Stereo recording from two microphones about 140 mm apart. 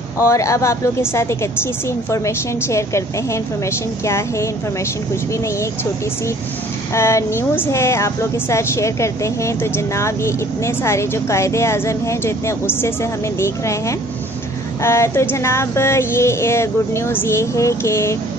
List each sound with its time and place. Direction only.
0.2 s speech: 20° left (ahead or behind)
4.0 s speech: 20° left (ahead or behind)
6.9 s speech: 20° left (ahead or behind)